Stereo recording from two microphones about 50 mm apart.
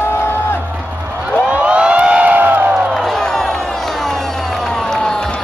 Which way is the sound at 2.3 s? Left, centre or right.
Right.